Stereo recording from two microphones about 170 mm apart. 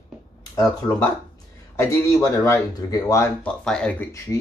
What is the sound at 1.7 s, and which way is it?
Speech, 20° left (ahead or behind).